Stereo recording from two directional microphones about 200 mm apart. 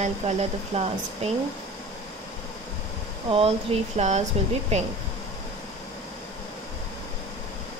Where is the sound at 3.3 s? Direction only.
30° right (ahead or behind).